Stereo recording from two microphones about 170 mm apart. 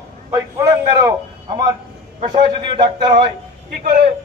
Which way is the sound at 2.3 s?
30° right (ahead or behind).